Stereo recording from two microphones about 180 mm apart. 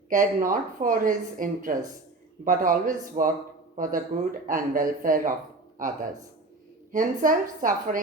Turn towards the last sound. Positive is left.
turn(degrees=-45)  # may be behind; listen again after turning